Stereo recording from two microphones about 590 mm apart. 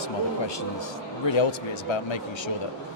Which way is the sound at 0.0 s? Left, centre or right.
Left.